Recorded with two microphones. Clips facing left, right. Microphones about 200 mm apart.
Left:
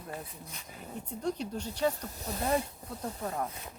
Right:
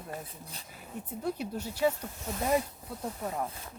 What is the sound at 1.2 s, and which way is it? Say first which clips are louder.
Speech: even; 5° right (ahead or behind).